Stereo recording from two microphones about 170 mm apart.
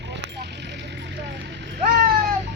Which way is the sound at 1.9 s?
60° right (ahead or behind).